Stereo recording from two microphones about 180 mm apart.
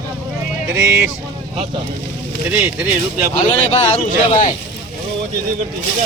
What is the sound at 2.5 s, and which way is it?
Speech, 5° right (ahead or behind).